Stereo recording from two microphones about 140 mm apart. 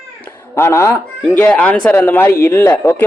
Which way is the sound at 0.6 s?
20° left (ahead or behind).